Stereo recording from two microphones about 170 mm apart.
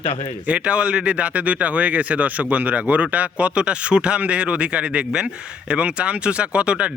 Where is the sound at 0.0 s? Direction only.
35° left (ahead or behind).